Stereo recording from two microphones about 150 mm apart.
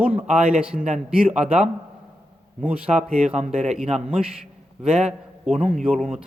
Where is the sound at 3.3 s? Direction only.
50° right (ahead or behind).